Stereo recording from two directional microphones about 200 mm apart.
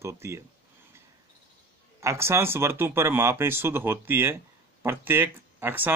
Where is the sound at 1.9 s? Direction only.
15° right (ahead or behind).